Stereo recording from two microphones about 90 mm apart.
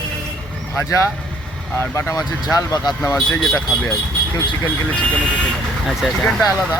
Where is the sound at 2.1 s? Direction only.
45° left (ahead or behind).